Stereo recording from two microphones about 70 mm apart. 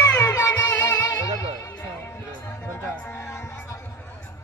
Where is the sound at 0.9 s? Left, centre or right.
Left.